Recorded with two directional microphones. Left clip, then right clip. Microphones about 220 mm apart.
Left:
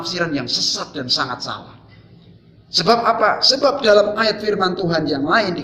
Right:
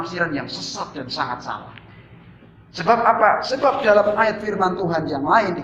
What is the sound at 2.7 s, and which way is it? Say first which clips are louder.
A man's voice: left 1 dB; 45° left (ahead or behind).